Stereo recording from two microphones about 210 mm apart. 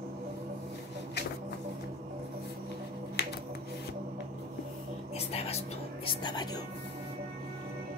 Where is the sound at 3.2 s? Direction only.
50° left (ahead or behind).